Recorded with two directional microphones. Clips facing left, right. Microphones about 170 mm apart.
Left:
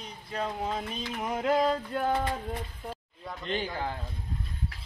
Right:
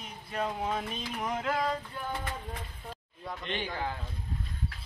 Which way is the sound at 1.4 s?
25° left (ahead or behind).